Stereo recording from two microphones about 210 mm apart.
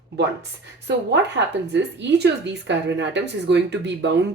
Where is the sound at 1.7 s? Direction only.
55° right (ahead or behind).